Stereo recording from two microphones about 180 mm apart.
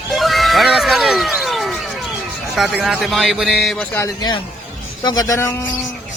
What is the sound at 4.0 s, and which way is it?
A man's voice, 20° left (ahead or behind).